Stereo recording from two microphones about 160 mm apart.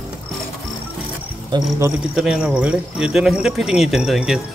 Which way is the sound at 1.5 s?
20° right (ahead or behind).